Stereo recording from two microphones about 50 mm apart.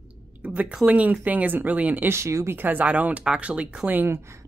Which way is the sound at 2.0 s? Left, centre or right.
Right.